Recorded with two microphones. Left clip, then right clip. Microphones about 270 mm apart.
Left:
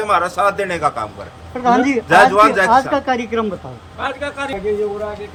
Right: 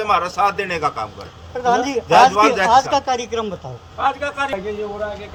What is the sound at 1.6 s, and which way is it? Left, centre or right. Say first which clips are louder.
A man's voice: left 3 dB; right.